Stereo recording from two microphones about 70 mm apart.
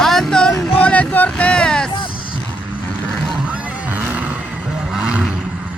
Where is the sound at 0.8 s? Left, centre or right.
Left.